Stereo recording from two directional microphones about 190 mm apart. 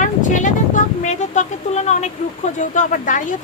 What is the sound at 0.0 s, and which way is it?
Vehicle, 40° left (ahead or behind).